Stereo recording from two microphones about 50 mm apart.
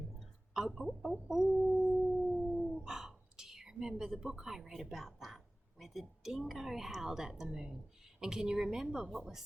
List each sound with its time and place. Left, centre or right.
0.2 s a sound: centre
1.3 s a woman's voice: centre
1.8 s howl: centre
2.2 s howl: centre
2.8 s whispering: centre
5.8 s a woman's voice: centre
9.0 s a woman's voice: centre